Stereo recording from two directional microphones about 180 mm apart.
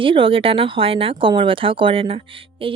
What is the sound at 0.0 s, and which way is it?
Speech, 30° right (ahead or behind).